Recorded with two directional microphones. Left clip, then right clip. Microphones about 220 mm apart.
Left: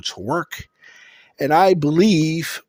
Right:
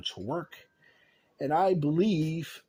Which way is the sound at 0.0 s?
40° left (ahead or behind).